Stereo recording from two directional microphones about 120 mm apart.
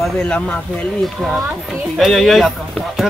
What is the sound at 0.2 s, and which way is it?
Speech, 10° left (ahead or behind).